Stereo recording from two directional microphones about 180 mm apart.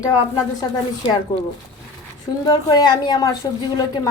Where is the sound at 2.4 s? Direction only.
20° left (ahead or behind).